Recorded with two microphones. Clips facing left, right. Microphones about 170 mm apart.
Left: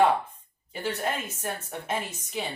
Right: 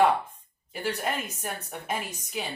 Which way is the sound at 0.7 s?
5° right (ahead or behind).